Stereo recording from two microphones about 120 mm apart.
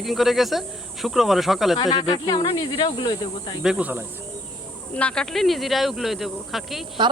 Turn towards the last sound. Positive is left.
turn(degrees=-40)  # may be behind; listen again after turning